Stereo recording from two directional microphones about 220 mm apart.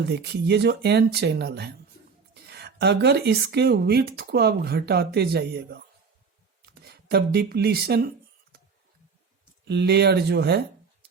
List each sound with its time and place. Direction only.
0.0 s speech: 50° right (ahead or behind)
9.6 s speech: 50° right (ahead or behind)